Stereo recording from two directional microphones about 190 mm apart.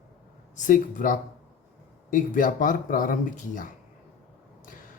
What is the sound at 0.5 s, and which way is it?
Speech, 40° left (ahead or behind).